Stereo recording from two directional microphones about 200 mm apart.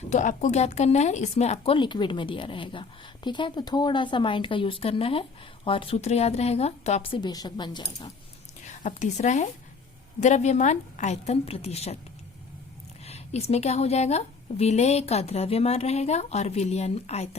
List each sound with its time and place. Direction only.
0.1 s a woman's voice: 40° left (ahead or behind); by 8.1 s 20° left (ahead or behind)
8.6 s a woman's voice: 35° left (ahead or behind)
13.1 s a woman's voice: 30° left (ahead or behind)